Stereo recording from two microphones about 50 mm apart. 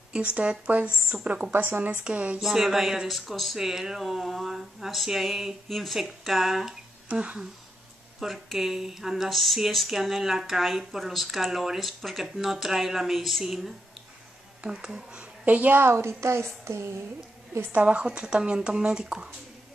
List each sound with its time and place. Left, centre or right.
0.1 s speech: right
1.5 s a woman's voice: right
1.9 s speech: right
2.3 s speech: centre
14.8 s speech: centre
15.4 s a woman's voice: right
15.8 s a woman's voice: right
17.7 s speech: right